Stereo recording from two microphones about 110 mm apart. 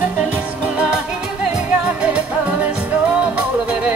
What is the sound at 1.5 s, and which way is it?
Music, 10° right (ahead or behind).